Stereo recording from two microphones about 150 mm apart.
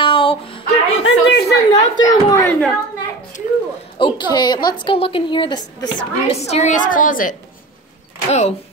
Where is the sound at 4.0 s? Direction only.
30° left (ahead or behind).